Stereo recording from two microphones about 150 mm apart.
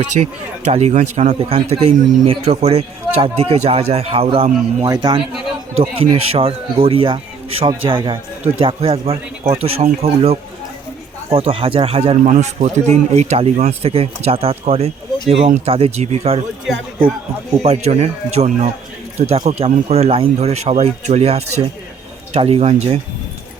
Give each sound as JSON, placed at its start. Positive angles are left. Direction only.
{"t": 0.0, "sound": "a man's voice", "side_deg": -50}
{"t": 4.9, "sound": "speech", "side_deg": -30}
{"t": 6.0, "sound": "a man's voice", "side_deg": -40}
{"t": 17.6, "sound": "a man's voice", "side_deg": -45}